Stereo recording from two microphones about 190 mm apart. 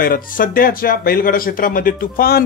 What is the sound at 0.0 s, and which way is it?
Speech, 50° left (ahead or behind).